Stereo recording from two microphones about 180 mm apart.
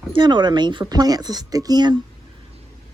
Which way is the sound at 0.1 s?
25° right (ahead or behind).